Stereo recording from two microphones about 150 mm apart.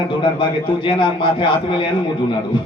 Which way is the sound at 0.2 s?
35° left (ahead or behind).